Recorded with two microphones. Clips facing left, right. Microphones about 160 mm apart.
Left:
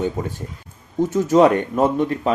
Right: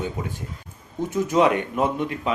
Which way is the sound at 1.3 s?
45° left (ahead or behind).